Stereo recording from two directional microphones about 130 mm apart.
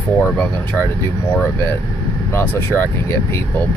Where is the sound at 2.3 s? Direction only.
15° left (ahead or behind).